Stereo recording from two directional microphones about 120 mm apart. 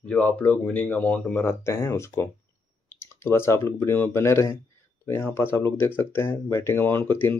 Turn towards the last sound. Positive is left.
turn(degrees=15)  # may be behind; listen again after turning